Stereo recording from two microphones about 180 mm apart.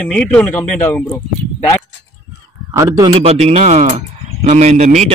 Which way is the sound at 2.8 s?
20° right (ahead or behind).